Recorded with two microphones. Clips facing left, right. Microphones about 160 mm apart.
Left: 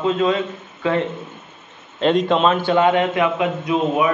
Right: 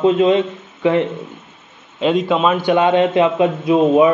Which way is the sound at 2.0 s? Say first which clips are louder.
Right 1 dB; 5° right (ahead or behind).